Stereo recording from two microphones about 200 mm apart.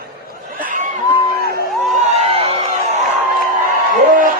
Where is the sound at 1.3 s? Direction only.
50° left (ahead or behind).